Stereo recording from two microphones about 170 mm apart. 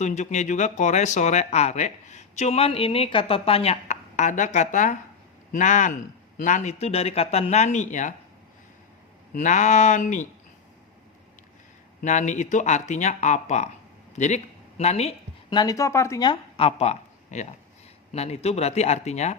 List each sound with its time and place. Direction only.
0.0 s speech: 45° left (ahead or behind)
9.3 s speech: 45° left (ahead or behind)
11.9 s speech: 45° left (ahead or behind)
15.4 s speech: 25° left (ahead or behind); by 19.4 s 40° left (ahead or behind)